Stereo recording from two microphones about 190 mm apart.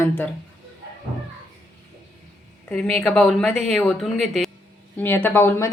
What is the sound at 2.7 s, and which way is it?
A woman's voice, 5° left (ahead or behind).